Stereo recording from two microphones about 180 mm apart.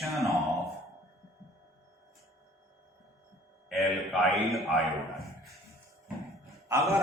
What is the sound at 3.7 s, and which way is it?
A man's voice, centre (ahead or behind).